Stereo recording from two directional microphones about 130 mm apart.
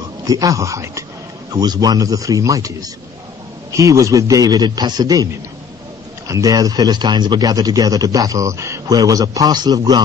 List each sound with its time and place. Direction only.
0.2 s speech: 25° right (ahead or behind)